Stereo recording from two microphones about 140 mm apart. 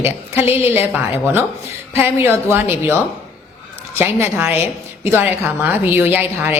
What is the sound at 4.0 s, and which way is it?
A woman's voice, 15° right (ahead or behind).